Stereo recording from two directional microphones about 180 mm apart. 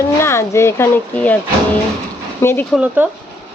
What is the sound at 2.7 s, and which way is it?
Speech, 10° right (ahead or behind).